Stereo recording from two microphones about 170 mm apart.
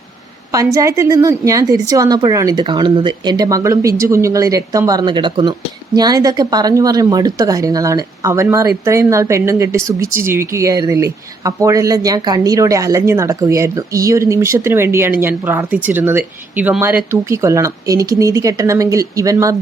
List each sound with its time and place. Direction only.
0.5 s a woman's voice: 20° right (ahead or behind)